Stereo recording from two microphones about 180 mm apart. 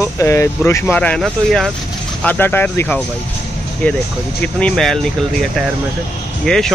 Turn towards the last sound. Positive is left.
turn(degrees=0)  # may be behind; listen again after turning